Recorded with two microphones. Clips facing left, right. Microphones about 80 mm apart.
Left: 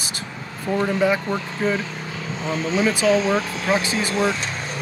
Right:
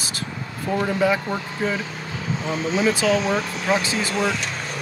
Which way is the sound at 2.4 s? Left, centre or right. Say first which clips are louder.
Left 1 dB; left.